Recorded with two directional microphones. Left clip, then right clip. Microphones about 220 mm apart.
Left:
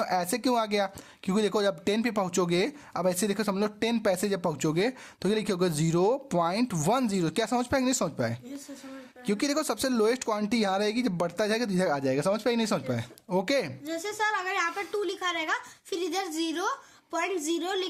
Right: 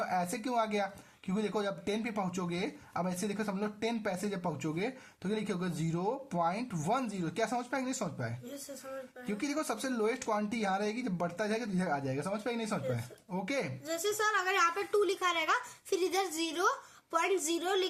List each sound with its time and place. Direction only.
0.0 s speech: 50° left (ahead or behind)
13.8 s a woman's voice: 15° left (ahead or behind)